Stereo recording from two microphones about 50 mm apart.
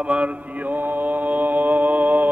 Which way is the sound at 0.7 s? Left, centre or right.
Right.